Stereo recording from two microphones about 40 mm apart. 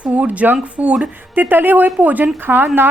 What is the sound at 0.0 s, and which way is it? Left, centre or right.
Speech, right.